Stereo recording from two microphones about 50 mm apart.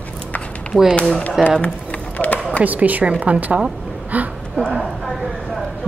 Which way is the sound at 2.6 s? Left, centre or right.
Right.